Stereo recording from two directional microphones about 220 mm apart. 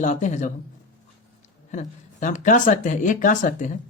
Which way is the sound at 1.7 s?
35° left (ahead or behind).